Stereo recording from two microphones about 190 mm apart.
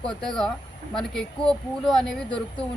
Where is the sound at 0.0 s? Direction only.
5° left (ahead or behind).